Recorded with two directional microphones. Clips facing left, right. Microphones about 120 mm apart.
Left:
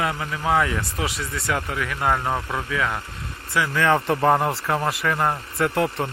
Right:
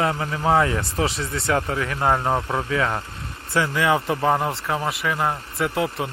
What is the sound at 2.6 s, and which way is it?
Speech, 30° right (ahead or behind).